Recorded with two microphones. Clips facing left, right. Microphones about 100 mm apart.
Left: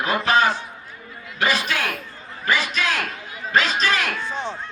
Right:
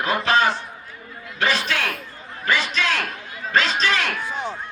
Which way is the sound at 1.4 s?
15° left (ahead or behind).